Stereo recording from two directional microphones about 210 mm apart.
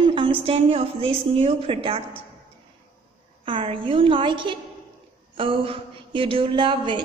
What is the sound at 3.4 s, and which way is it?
Speech, 25° right (ahead or behind).